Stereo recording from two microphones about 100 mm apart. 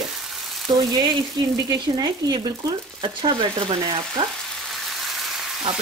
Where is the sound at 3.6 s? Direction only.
55° right (ahead or behind).